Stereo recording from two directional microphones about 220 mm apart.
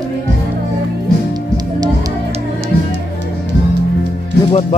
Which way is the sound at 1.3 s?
15° right (ahead or behind).